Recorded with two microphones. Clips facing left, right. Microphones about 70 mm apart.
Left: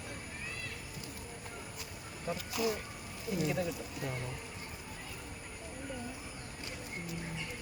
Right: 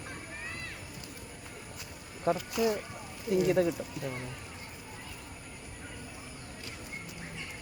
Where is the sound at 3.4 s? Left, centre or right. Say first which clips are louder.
Right 8 dB; right.